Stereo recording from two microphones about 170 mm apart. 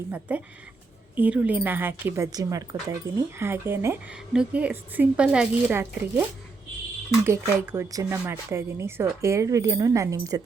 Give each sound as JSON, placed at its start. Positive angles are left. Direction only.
{"t": 0.1, "sound": "a woman's voice", "side_deg": -10}
{"t": 7.3, "sound": "a woman's voice", "side_deg": -15}